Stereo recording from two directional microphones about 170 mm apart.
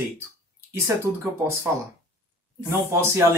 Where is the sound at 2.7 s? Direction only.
15° right (ahead or behind).